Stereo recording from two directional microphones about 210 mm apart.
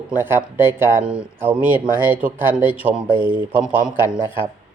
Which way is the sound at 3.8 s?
20° right (ahead or behind).